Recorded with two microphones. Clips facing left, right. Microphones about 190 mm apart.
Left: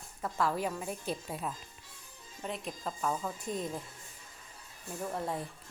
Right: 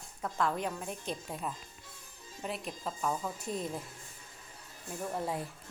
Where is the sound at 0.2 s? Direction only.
5° left (ahead or behind).